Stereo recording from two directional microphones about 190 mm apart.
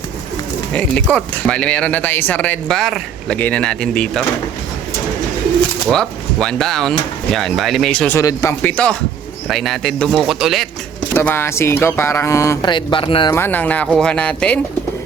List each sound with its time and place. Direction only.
0.7 s speech: 5° left (ahead or behind)
5.9 s speech: 5° left (ahead or behind)
11.1 s speech: 10° left (ahead or behind)
13.3 s speech: 10° left (ahead or behind)